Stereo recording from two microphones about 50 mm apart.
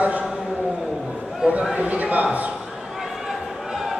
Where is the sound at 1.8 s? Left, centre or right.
Right.